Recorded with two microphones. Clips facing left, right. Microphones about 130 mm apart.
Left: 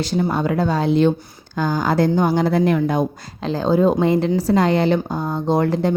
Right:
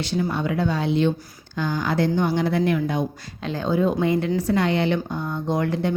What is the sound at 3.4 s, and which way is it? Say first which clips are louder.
A woman's voice: left 5 dB; 35° left (ahead or behind).